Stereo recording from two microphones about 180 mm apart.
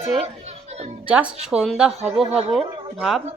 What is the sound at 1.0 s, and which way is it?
A man's voice, 10° right (ahead or behind).